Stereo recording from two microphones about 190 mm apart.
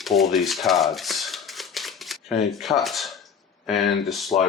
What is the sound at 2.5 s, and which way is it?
Speech, centre (ahead or behind).